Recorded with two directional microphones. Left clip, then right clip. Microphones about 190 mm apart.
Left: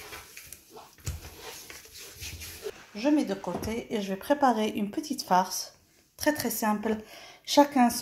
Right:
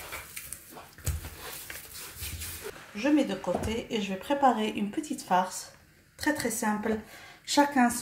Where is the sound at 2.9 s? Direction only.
40° left (ahead or behind).